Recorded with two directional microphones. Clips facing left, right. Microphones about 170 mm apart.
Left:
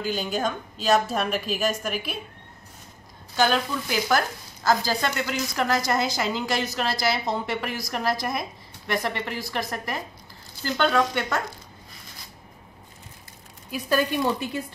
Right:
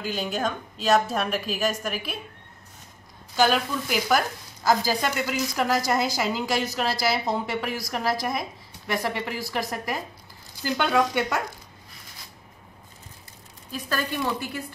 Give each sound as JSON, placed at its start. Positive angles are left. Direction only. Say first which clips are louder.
{"t": 0.0, "sound": "a woman's voice", "louder": "left 1 dB", "side_deg": 0}
{"t": 3.3, "sound": "a woman's voice", "louder": "right 1 dB", "side_deg": -5}
{"t": 13.7, "sound": "speech", "louder": "left 5 dB", "side_deg": 15}